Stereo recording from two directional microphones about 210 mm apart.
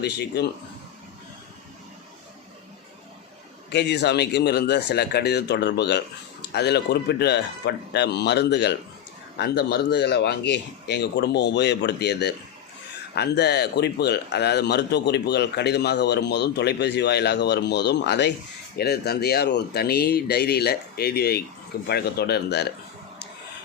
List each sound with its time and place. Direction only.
0.0 s a man's voice: 50° left (ahead or behind)
3.7 s a man's voice: 55° left (ahead or behind)